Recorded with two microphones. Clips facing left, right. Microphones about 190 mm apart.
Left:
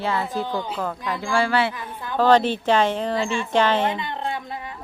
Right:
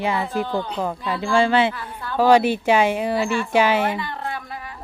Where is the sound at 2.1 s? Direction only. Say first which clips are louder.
Right 2 dB; 10° right (ahead or behind).